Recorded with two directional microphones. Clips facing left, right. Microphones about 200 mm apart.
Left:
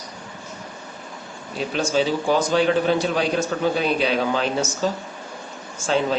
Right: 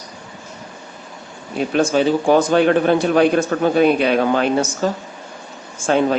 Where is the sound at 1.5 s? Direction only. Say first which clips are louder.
Right 5 dB; 55° right (ahead or behind).